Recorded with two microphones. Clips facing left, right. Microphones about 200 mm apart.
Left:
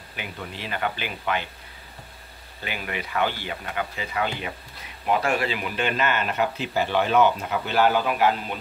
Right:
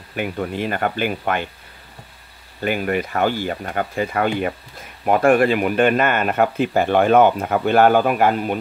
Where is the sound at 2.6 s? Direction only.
45° right (ahead or behind).